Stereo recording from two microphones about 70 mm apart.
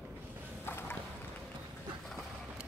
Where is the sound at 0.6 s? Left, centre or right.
Left.